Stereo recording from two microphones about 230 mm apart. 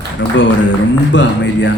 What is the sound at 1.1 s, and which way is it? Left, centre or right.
Speech, left.